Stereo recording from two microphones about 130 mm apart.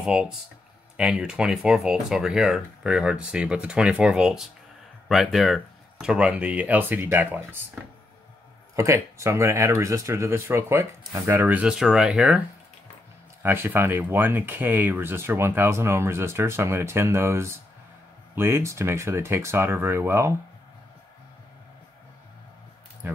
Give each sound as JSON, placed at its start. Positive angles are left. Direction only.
{"t": 0.0, "sound": "speech", "side_deg": -5}
{"t": 13.4, "sound": "speech", "side_deg": -15}
{"t": 23.0, "sound": "speech", "side_deg": -20}